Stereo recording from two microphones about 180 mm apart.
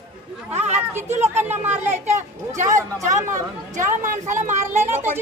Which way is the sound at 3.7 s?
45° right (ahead or behind).